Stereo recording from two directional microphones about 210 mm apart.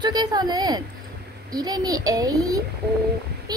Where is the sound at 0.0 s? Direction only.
20° right (ahead or behind).